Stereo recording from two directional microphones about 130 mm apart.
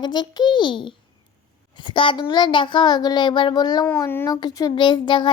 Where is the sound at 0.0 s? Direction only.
35° left (ahead or behind).